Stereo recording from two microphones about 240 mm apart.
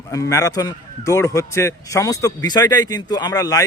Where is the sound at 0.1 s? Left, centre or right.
Centre.